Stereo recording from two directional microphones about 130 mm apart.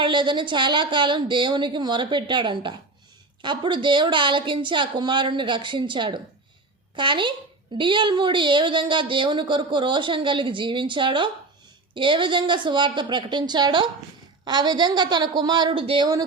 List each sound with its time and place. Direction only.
0.0 s a woman's voice: 40° right (ahead or behind)